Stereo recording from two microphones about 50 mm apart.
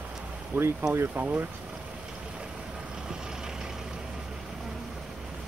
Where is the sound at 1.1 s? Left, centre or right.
Right.